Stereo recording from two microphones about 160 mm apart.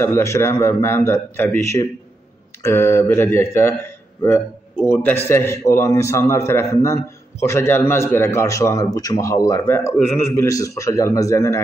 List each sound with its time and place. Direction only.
0.0 s a man's voice: 20° left (ahead or behind)
4.9 s a man's voice: 10° left (ahead or behind)